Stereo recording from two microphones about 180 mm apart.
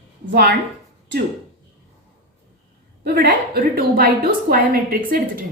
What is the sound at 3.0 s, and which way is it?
A woman's voice, 60° right (ahead or behind).